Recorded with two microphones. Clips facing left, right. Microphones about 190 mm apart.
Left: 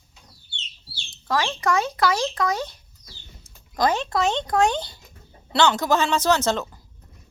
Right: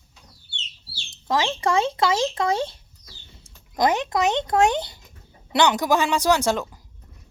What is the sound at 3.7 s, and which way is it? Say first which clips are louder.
Speech: right 1 dB; 20° right (ahead or behind).